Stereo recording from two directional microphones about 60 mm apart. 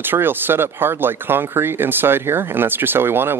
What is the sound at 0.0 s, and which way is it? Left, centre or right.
A man's voice, right.